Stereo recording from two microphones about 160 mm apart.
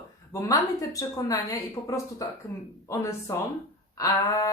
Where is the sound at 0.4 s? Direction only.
20° left (ahead or behind).